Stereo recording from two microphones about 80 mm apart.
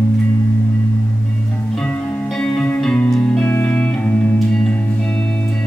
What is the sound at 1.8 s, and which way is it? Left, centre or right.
Music, centre.